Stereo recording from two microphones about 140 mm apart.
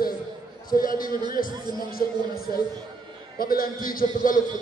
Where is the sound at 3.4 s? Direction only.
90° left.